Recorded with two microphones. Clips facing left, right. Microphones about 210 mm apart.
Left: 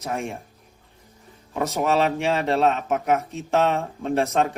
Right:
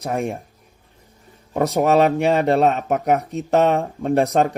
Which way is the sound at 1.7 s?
45° right (ahead or behind).